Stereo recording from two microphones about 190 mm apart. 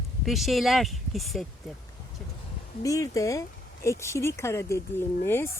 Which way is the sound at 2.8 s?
15° left (ahead or behind).